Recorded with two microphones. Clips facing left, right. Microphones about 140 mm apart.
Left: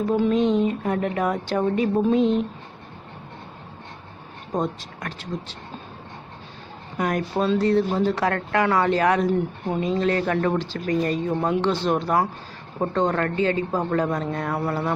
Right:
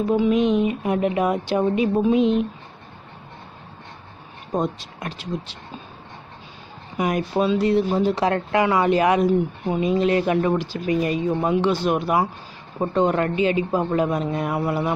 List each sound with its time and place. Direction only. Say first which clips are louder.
0.1 s speech: right 2 dB; 5° right (ahead or behind)
0.4 s speech: right 1 dB; 15° right (ahead or behind)
4.5 s speech: right 2 dB; 15° right (ahead or behind)
7.0 s speech: right 2 dB; 15° right (ahead or behind)